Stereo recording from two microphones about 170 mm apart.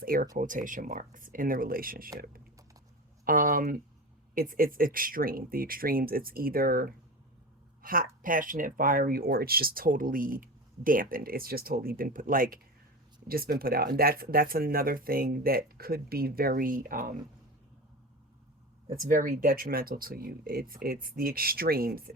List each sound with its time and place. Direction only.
0.0 s speech: 60° right (ahead or behind)
18.9 s speech: 50° right (ahead or behind)